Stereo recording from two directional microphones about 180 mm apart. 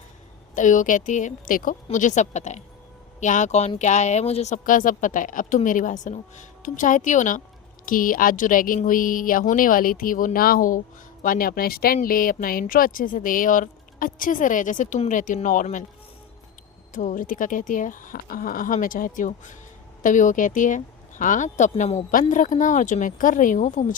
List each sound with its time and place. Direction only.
0.5 s a woman's voice: 45° left (ahead or behind)
16.9 s a woman's voice: 45° left (ahead or behind)